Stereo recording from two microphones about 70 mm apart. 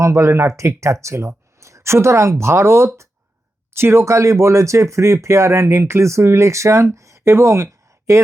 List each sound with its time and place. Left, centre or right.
0.0 s speech: right